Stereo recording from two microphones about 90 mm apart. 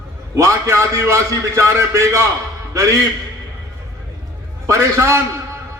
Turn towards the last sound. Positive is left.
turn(degrees=-30)  # may be behind; listen again after turning